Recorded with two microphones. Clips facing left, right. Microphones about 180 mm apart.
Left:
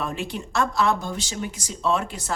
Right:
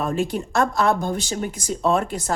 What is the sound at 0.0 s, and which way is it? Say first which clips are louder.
Speech: right 6 dB; 45° right (ahead or behind).